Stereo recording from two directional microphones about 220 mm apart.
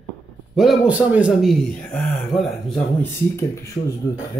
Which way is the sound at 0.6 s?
5° right (ahead or behind).